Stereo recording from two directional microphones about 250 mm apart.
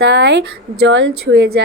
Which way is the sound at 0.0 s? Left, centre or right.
Right.